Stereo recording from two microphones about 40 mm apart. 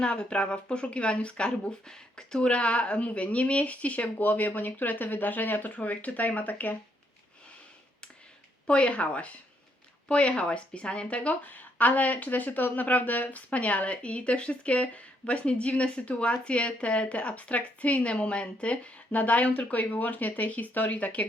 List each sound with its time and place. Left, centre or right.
0.0 s speech: left
1.9 s speech: centre
2.5 s speech: left
4.3 s speech: left
8.6 s speech: left
11.4 s speech: left
19.8 s speech: left